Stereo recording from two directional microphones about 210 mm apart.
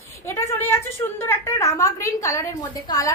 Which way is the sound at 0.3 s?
10° left (ahead or behind).